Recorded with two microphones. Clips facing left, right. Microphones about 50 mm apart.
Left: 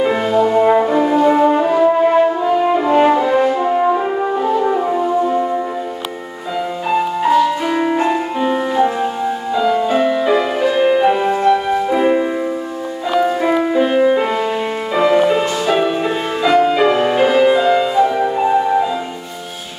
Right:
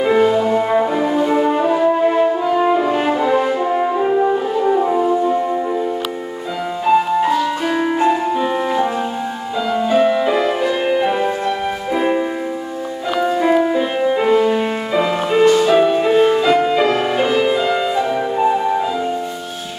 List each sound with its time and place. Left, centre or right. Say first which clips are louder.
0.0 s french horn: even; centre
6.9 s music: right 1 dB; centre